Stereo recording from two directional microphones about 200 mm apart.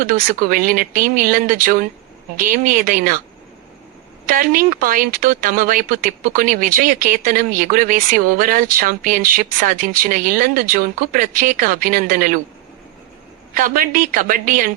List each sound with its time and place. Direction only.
0.0 s speech: 45° right (ahead or behind)
4.3 s speech: 45° right (ahead or behind)
13.5 s speech: 45° right (ahead or behind)